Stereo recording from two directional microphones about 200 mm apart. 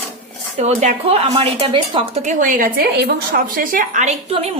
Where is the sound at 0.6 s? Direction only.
35° right (ahead or behind).